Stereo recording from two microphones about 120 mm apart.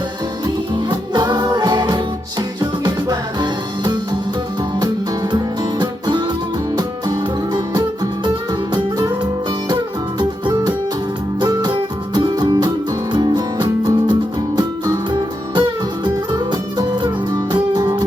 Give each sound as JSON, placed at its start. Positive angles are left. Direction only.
{"t": 0.4, "sound": "music", "side_deg": -35}
{"t": 5.8, "sound": "music", "side_deg": -35}